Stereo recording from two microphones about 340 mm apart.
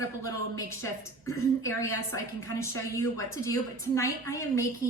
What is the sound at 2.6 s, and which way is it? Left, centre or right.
A woman's voice, centre.